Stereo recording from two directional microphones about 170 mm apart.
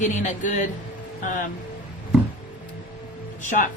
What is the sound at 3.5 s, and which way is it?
Speech, 50° left (ahead or behind).